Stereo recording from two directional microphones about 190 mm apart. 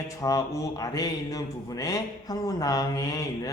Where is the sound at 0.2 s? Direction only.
15° left (ahead or behind).